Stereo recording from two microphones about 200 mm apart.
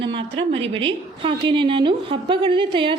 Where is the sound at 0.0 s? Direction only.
25° right (ahead or behind).